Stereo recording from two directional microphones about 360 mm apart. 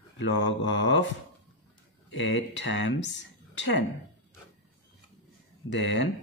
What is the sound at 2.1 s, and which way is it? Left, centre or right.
Speech, left.